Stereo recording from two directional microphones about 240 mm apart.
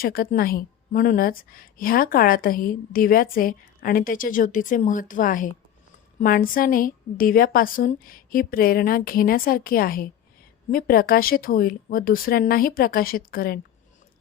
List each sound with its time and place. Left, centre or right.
0.0 s a woman's voice: left